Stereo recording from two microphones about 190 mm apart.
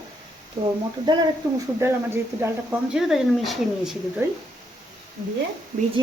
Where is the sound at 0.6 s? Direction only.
25° right (ahead or behind); by 3.9 s centre (ahead or behind).